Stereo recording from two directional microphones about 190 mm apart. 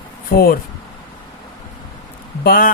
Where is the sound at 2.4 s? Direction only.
50° left (ahead or behind).